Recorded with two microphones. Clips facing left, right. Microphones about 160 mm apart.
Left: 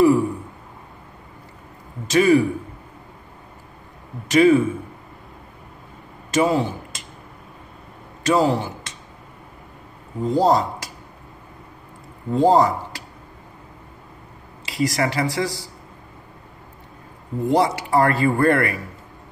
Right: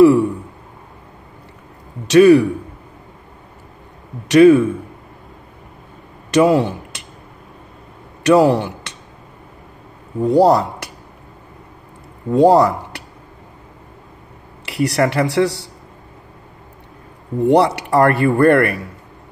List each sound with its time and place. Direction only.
0.0 s a sound: 70° right (ahead or behind)
2.0 s a man's voice: 70° right (ahead or behind)
4.3 s a man's voice: 70° right (ahead or behind)
6.3 s speech: 70° right (ahead or behind)
8.2 s a man's voice: 70° right (ahead or behind)
10.2 s a man's voice: 70° right (ahead or behind)
12.3 s speech: 75° right (ahead or behind)
14.6 s a man's voice: 65° right (ahead or behind)
17.4 s a man's voice: 70° right (ahead or behind)